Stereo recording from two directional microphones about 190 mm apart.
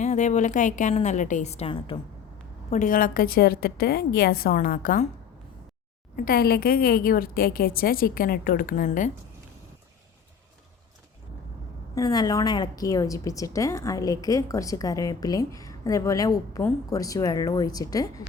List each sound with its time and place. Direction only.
0.0 s a woman's voice: 40° left (ahead or behind)
2.6 s a woman's voice: 40° left (ahead or behind)
6.1 s a woman's voice: 50° left (ahead or behind)
11.9 s a woman's voice: 20° left (ahead or behind)